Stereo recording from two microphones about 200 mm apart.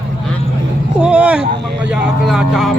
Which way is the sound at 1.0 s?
5° right (ahead or behind).